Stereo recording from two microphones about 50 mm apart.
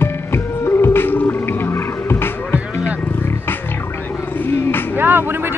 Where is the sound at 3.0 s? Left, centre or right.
Left.